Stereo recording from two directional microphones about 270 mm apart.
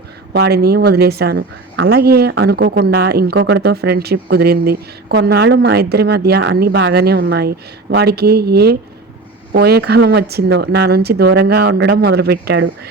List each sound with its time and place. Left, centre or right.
0.3 s a woman's voice: right